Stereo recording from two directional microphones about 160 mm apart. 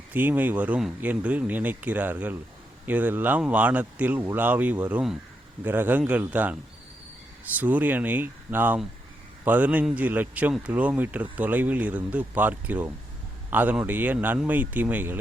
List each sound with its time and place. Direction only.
0.1 s a man's voice: 10° right (ahead or behind)